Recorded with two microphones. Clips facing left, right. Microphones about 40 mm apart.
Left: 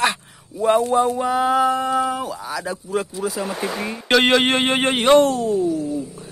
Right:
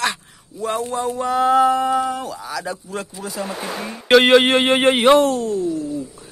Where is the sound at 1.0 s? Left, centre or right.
Centre.